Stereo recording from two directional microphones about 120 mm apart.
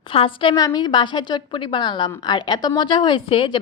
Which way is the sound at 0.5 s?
35° left (ahead or behind).